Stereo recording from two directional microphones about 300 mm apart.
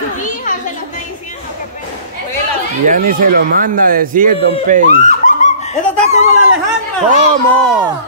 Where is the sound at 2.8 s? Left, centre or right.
Right.